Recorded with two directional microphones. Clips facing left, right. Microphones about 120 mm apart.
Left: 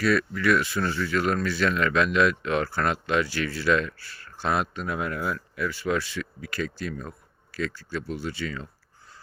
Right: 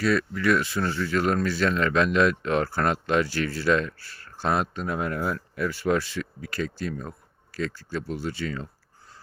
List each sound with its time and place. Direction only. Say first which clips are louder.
0.0 s speech: even; 30° right (ahead or behind)